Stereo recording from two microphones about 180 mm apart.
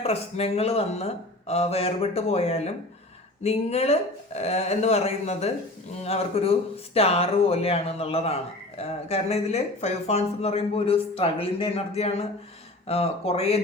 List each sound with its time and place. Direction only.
0.0 s speech: 35° left (ahead or behind)